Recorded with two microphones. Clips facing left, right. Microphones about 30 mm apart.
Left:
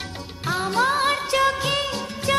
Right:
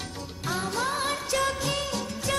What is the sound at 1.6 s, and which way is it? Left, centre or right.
Music of bollywood, left.